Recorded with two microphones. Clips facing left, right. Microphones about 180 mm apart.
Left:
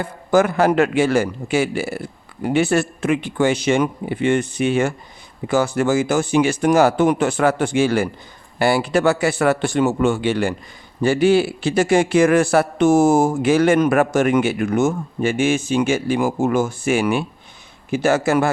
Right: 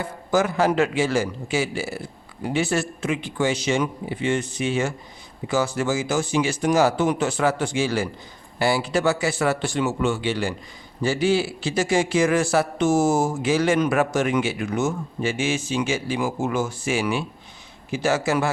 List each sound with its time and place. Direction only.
0.0 s a man's voice: 55° left (ahead or behind)